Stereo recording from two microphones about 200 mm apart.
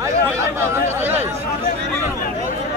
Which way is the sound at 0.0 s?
15° right (ahead or behind).